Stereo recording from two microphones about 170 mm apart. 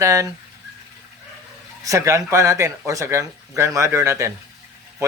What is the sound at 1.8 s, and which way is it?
A man's voice, 20° right (ahead or behind).